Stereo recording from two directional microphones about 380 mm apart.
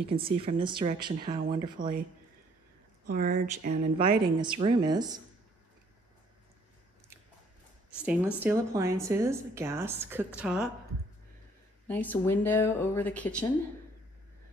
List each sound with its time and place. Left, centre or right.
0.0 s speech: centre
3.1 s speech: centre
8.0 s speech: centre
11.9 s speech: centre